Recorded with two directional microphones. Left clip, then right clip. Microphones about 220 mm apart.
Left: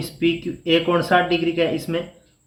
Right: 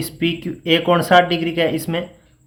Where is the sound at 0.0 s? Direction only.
50° right (ahead or behind).